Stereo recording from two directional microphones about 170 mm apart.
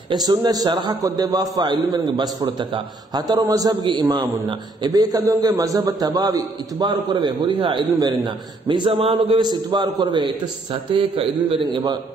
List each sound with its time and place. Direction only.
0.1 s a man's voice: 25° right (ahead or behind)